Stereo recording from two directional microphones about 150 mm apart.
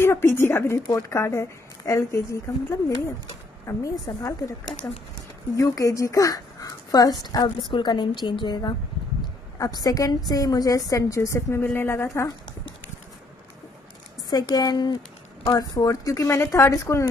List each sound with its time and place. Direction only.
0.0 s a woman's voice: 15° left (ahead or behind)
14.3 s a woman's voice: 25° left (ahead or behind)